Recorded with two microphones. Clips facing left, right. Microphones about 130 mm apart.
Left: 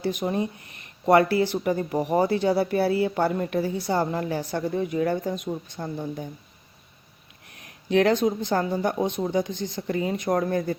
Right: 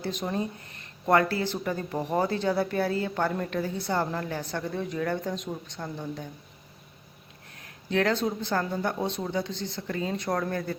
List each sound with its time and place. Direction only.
0.1 s a woman's voice: 15° left (ahead or behind)
7.6 s a woman's voice: 20° left (ahead or behind)